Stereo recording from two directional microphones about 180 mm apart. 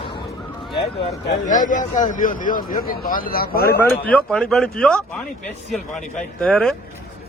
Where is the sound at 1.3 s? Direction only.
45° left (ahead or behind).